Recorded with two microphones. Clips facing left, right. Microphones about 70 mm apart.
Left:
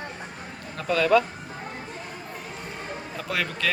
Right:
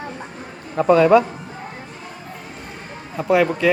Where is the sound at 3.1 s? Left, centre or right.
Right.